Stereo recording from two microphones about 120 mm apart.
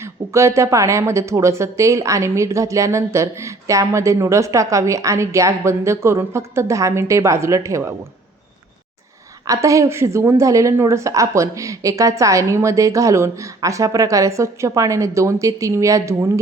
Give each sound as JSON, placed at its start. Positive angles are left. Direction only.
{"t": 0.0, "sound": "a woman's voice", "side_deg": -25}
{"t": 9.5, "sound": "a woman's voice", "side_deg": -25}